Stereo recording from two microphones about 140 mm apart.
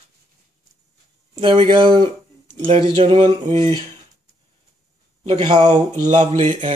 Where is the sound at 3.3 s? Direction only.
50° right (ahead or behind).